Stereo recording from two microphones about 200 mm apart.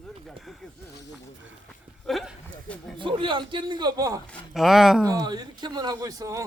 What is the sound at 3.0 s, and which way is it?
Speech, 25° right (ahead or behind).